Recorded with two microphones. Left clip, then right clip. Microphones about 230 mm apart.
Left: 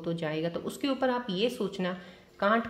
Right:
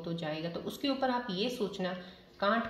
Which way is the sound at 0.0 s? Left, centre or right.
Left.